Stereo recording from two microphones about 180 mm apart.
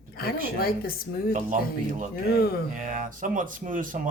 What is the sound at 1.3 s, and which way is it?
Speech, 45° right (ahead or behind).